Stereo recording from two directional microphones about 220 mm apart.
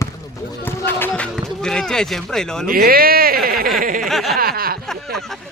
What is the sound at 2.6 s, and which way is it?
Speech, 40° right (ahead or behind).